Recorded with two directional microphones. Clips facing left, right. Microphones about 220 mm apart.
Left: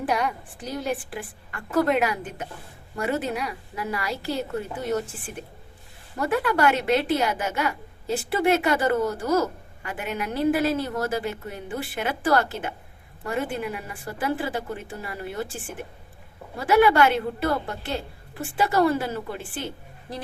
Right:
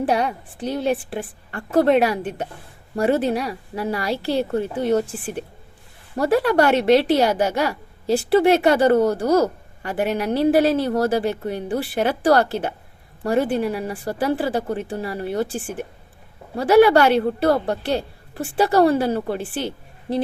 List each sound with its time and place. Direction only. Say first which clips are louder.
0.0 s speech: right 5 dB; 30° right (ahead or behind)
16.6 s speech: right 5 dB; 35° right (ahead or behind)
19.6 s a sound: right 7 dB; 25° right (ahead or behind)